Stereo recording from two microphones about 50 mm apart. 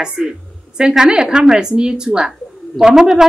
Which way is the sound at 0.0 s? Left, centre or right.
Centre.